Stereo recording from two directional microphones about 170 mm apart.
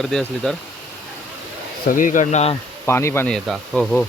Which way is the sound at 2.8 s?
15° left (ahead or behind).